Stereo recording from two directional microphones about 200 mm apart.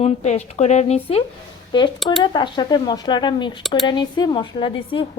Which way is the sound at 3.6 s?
Centre (ahead or behind).